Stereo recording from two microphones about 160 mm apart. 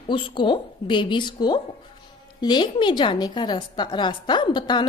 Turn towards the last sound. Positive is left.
turn(degrees=30)  # may be behind; listen again after turning